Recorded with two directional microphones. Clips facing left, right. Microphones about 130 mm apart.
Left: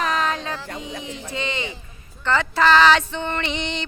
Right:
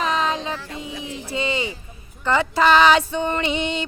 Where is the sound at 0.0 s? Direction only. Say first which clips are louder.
Right 1 dB; 20° right (ahead or behind).